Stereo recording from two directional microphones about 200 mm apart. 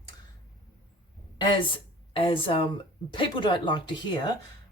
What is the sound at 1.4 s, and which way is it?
Speech, 20° left (ahead or behind).